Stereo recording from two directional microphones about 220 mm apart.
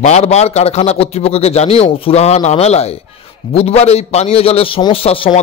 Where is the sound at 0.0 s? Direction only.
30° left (ahead or behind).